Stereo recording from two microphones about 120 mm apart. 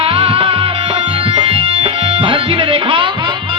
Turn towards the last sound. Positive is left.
turn(degrees=-50)  # may be behind; listen again after turning